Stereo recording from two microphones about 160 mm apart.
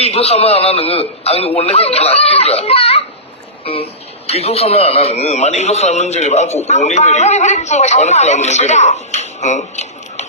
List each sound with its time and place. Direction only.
0.0 s a man's voice: 40° left (ahead or behind)
4.3 s a man's voice: 40° left (ahead or behind)